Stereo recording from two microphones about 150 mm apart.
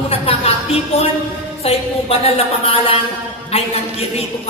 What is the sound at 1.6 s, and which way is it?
A woman's voice, 40° left (ahead or behind).